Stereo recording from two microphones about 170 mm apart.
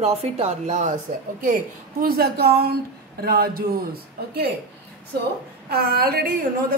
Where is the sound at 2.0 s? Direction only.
65° right (ahead or behind).